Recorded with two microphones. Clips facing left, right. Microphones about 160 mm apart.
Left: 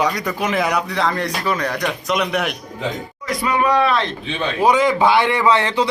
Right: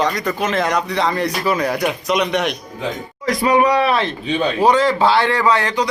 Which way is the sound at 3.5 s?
20° right (ahead or behind).